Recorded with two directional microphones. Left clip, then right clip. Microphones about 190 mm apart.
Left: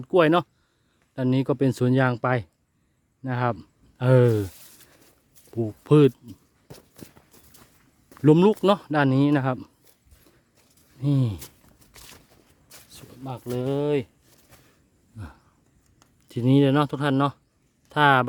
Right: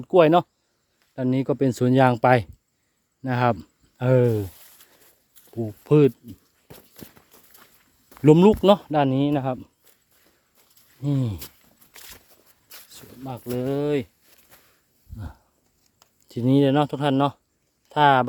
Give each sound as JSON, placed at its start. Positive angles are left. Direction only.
{"t": 0.0, "sound": "speech", "side_deg": 0}
{"t": 4.2, "sound": "speech", "side_deg": 10}
{"t": 5.8, "sound": "speech", "side_deg": 10}
{"t": 6.2, "sound": "dog", "side_deg": -10}
{"t": 8.1, "sound": "speech", "side_deg": -5}
{"t": 11.0, "sound": "speech", "side_deg": 10}
{"t": 11.9, "sound": "a sound", "side_deg": -15}
{"t": 13.2, "sound": "speech", "side_deg": 0}
{"t": 16.3, "sound": "speech", "side_deg": 5}